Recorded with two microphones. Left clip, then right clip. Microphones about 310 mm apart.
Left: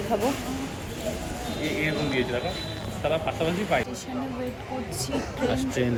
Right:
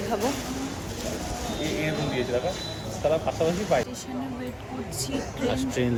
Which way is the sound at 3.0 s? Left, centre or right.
Right.